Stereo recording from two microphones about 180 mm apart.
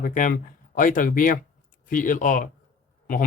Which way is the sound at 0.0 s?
50° left (ahead or behind).